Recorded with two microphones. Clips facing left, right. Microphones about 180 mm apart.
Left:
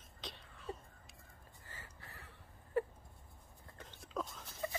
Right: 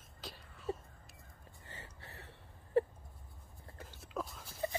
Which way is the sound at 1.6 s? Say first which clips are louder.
Right 3 dB; 25° right (ahead or behind).